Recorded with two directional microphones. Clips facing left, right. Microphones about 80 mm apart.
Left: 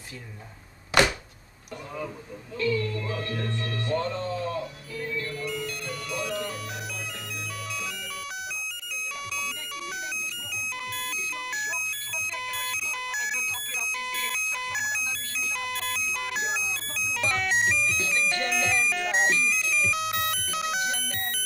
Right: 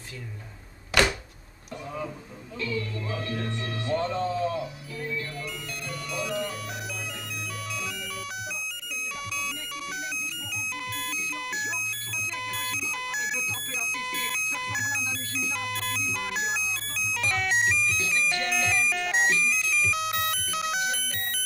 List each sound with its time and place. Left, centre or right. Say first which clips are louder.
2.6 s speech: left 5 dB; centre
5.4 s music: left 4 dB; centre
10.9 s music: even; centre
12.4 s a sound: even; centre
17.9 s music: even; left
18.2 s music: left 1 dB; centre